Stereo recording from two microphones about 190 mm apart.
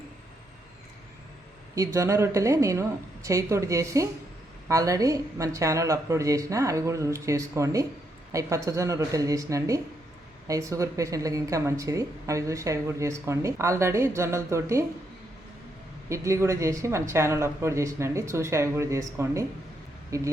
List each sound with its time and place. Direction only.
1.7 s speech: 15° right (ahead or behind)
16.0 s speech: 15° right (ahead or behind)